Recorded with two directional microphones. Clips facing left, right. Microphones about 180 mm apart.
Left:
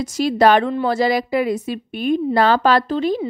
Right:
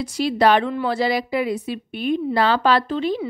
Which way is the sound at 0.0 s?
45° left (ahead or behind).